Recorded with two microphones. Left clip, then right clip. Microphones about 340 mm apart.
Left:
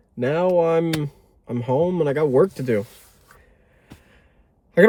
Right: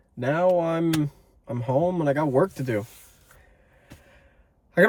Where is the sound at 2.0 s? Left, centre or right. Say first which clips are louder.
Left 4 dB; centre.